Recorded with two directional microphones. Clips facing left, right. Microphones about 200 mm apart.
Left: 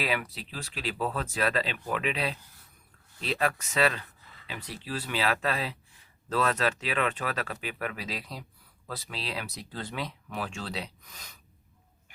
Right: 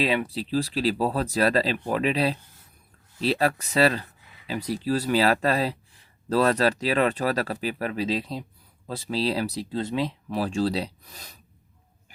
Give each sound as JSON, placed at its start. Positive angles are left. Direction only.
{"t": 0.0, "sound": "speech", "side_deg": -25}
{"t": 4.2, "sound": "a sound", "side_deg": -15}
{"t": 4.4, "sound": "speech", "side_deg": -40}